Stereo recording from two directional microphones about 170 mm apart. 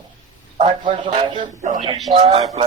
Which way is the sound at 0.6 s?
30° right (ahead or behind).